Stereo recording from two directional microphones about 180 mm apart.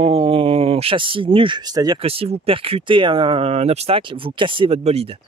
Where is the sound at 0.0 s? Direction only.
30° right (ahead or behind).